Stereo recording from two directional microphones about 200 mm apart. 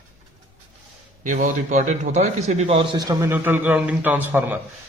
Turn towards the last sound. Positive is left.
turn(degrees=-10)  # may be behind; listen again after turning